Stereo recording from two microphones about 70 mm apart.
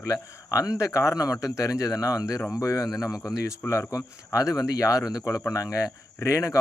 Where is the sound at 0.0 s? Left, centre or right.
Left.